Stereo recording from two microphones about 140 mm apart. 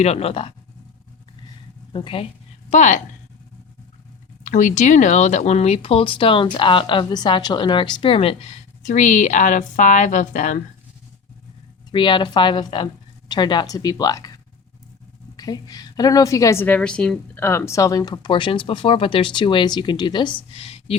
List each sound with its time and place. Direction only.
0.0 s speech: 50° left (ahead or behind)
1.9 s speech: 35° left (ahead or behind)
2.6 s a woman's voice: 60° left (ahead or behind)
4.4 s speech: 60° left (ahead or behind)
11.9 s a woman's voice: 35° left (ahead or behind)
15.4 s a woman's voice: 25° left (ahead or behind)
16.6 s speech: 10° left (ahead or behind); by 20.9 s 45° left (ahead or behind)